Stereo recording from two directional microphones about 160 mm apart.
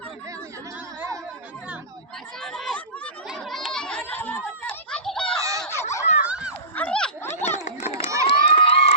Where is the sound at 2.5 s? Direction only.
Centre (ahead or behind).